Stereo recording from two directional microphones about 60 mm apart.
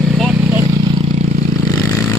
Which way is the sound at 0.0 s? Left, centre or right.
Centre.